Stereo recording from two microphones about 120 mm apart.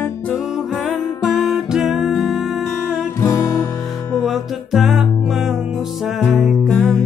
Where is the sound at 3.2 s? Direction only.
30° left (ahead or behind).